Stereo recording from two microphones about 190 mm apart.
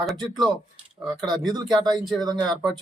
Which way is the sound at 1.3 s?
20° right (ahead or behind).